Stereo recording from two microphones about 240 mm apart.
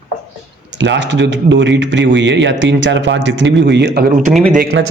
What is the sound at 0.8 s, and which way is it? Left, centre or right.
A man's voice, right.